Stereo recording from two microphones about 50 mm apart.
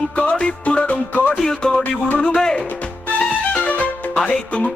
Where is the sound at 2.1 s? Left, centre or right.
Centre.